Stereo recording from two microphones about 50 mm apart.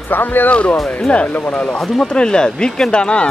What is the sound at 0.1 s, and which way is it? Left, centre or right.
Speech, left.